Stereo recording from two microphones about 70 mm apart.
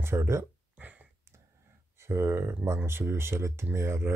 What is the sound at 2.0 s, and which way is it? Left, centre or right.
Speech, right.